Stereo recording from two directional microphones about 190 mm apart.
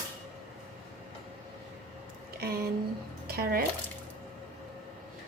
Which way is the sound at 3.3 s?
50° right (ahead or behind).